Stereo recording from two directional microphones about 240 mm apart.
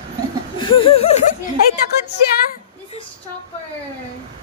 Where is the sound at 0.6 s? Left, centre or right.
Left.